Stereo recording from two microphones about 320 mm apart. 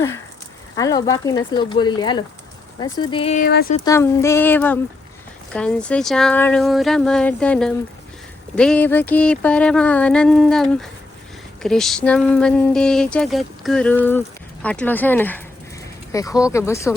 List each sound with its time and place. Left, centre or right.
0.8 s speech: centre; by 3.8 s left
3.8 s speech: centre